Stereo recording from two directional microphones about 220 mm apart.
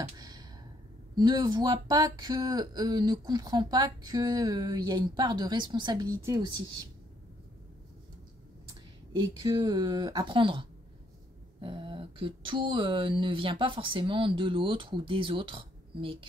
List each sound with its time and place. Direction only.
0.0 s a sound: 20° right (ahead or behind)
1.1 s speech: 20° right (ahead or behind)
9.2 s speech: 20° right (ahead or behind)